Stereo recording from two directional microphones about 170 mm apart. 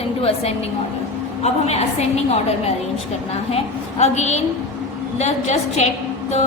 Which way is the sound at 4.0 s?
40° left (ahead or behind).